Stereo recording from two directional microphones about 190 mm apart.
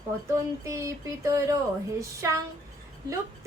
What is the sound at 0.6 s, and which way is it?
Speech, 15° right (ahead or behind).